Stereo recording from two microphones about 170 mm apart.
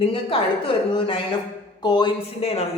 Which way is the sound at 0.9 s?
30° left (ahead or behind).